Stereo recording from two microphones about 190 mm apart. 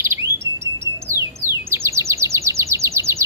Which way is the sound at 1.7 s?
15° right (ahead or behind).